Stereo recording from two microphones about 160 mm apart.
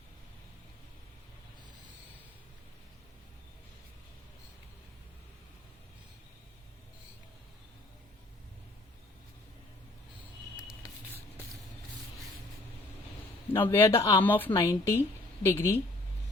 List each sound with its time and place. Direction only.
13.5 s speech: 15° left (ahead or behind)
14.3 s speech: 10° left (ahead or behind)